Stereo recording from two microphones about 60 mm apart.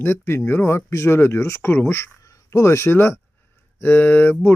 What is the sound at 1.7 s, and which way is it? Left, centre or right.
Speech, left.